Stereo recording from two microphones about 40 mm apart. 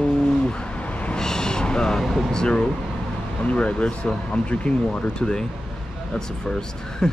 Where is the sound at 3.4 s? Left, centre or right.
Left.